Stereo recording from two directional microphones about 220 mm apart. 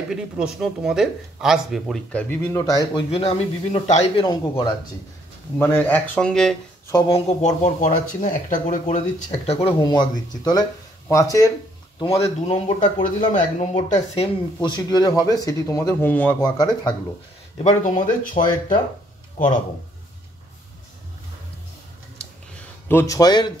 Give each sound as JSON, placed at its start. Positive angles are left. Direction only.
{"t": 0.1, "sound": "speech", "side_deg": -5}
{"t": 2.4, "sound": "speech", "side_deg": 15}
{"t": 5.6, "sound": "speech", "side_deg": 10}
{"t": 6.9, "sound": "speech", "side_deg": 20}
{"t": 12.0, "sound": "speech", "side_deg": 25}
{"t": 17.6, "sound": "speech", "side_deg": 35}
{"t": 19.4, "sound": "speech", "side_deg": 35}
{"t": 22.8, "sound": "speech", "side_deg": 10}